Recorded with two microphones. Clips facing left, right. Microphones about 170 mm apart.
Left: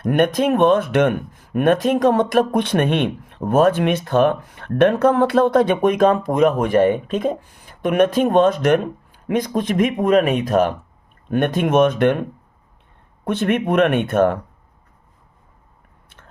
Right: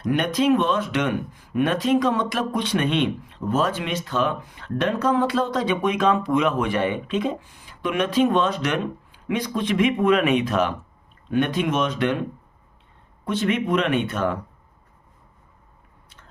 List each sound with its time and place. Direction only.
0.0 s speech: 55° left (ahead or behind)
13.2 s speech: 55° left (ahead or behind)